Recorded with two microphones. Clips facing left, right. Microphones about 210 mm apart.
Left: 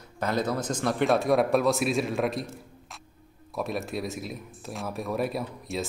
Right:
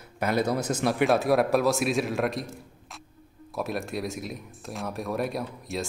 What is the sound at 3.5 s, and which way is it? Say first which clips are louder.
Speech: even; centre (ahead or behind).